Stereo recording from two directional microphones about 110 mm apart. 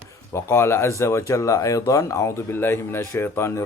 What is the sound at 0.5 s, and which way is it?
Speech, 25° left (ahead or behind).